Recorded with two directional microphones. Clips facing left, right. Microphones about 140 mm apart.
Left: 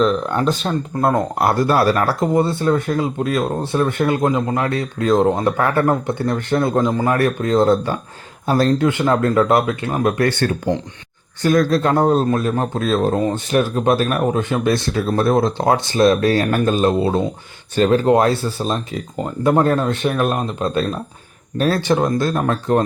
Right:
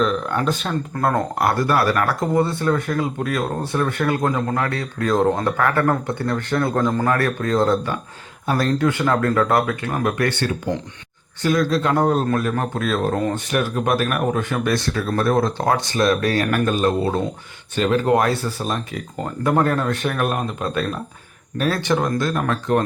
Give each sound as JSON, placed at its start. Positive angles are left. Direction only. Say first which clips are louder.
{"t": 0.0, "sound": "a man's voice", "louder": "left 3 dB", "side_deg": 30}
{"t": 7.2, "sound": "speech", "louder": "left 3 dB", "side_deg": 25}